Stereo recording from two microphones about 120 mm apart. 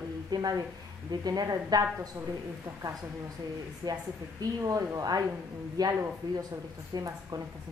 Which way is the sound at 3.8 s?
30° right (ahead or behind).